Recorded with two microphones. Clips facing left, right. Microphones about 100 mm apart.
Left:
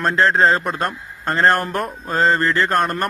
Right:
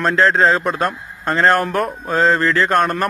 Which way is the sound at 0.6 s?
40° right (ahead or behind).